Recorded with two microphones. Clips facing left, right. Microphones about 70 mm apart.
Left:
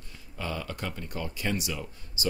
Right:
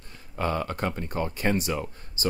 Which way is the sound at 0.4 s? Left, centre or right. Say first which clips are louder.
Right 7 dB; right.